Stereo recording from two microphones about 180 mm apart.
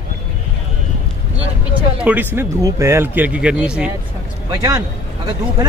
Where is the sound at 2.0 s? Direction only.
10° right (ahead or behind).